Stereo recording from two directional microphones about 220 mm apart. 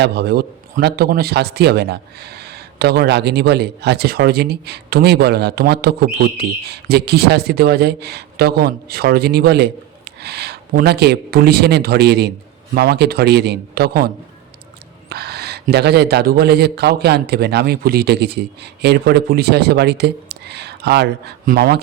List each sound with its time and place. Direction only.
0.0 s a man's voice: 45° right (ahead or behind)
15.1 s a man's voice: 45° right (ahead or behind)